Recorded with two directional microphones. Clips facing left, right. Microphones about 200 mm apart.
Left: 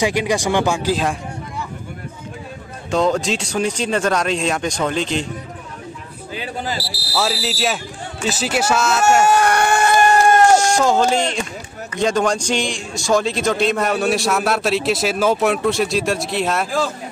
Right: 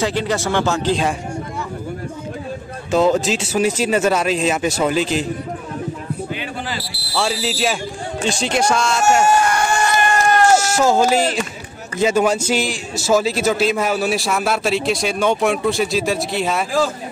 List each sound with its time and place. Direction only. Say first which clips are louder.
0.0 s speech: left 1 dB; 15° left (ahead or behind)
2.9 s a man's voice: right 2 dB; 5° right (ahead or behind)
7.2 s a man's voice: right 1 dB; centre (ahead or behind)
9.2 s a sound: left 1 dB; 60° left (ahead or behind)
10.5 s a man's voice: even; 10° right (ahead or behind)